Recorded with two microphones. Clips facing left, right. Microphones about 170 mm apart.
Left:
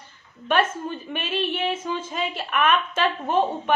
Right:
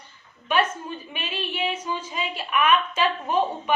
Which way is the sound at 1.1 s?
50° left (ahead or behind).